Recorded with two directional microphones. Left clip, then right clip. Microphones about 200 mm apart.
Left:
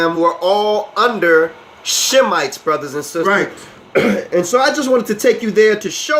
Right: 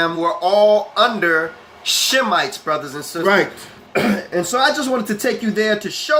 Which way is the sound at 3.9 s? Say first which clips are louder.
Left 5 dB; 25° left (ahead or behind).